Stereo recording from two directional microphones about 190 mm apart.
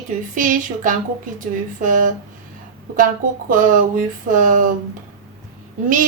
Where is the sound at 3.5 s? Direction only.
45° right (ahead or behind).